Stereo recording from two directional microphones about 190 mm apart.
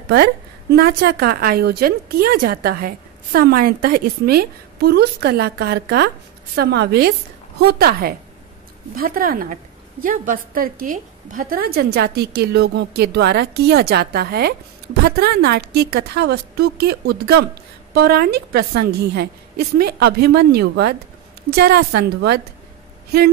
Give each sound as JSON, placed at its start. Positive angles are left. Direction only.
{"t": 0.1, "sound": "a woman's voice", "side_deg": -55}